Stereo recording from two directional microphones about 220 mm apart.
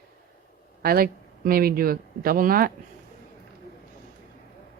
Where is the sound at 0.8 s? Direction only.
45° right (ahead or behind).